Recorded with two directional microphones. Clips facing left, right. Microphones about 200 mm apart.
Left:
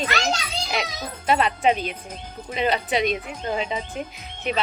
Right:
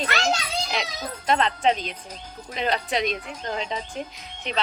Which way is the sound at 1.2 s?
10° left (ahead or behind).